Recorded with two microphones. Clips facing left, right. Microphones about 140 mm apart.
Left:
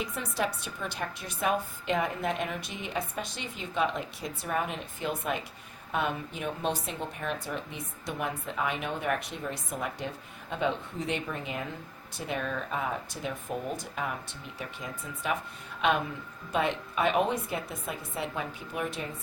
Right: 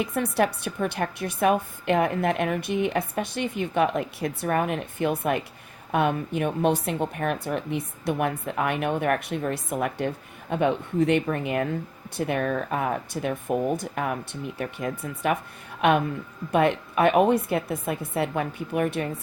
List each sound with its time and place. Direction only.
0.0 s a woman's voice: 60° right (ahead or behind)